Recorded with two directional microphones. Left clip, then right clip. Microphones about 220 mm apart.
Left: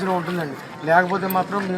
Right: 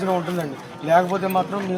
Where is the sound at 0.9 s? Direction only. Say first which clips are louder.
Even; 5° left (ahead or behind).